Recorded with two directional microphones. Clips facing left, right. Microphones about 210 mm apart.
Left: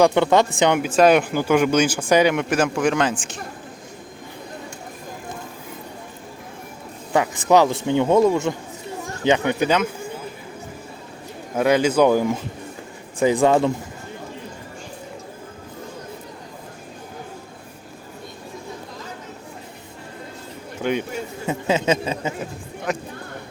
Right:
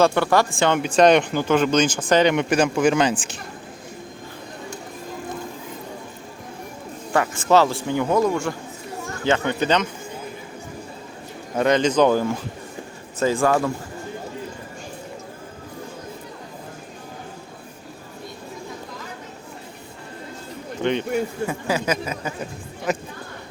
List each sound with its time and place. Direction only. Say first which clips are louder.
0.0 s speech: left 2 dB; 20° left (ahead or behind)
0.8 s speech: right 1 dB; 5° left (ahead or behind)
7.1 s speech: left 1 dB; 15° left (ahead or behind)
11.5 s speech: left 1 dB; 10° left (ahead or behind)
20.8 s speech: even; 5° left (ahead or behind)
21.4 s speech: left 3 dB; 25° left (ahead or behind)
22.9 s speech: right 1 dB; centre (ahead or behind)